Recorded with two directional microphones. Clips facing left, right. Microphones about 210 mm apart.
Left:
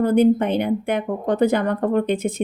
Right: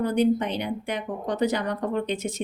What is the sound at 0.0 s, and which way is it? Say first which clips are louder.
A woman's voice: left 6 dB; 50° left (ahead or behind).